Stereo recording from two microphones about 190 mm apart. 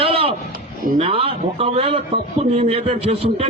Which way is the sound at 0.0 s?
30° right (ahead or behind).